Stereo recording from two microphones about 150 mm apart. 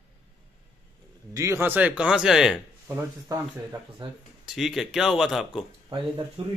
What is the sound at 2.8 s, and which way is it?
Speech, 20° right (ahead or behind).